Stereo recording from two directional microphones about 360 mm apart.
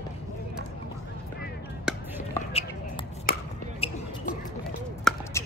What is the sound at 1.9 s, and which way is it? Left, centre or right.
Chop, centre.